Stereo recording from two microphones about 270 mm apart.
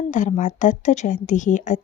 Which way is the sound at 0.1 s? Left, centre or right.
Left.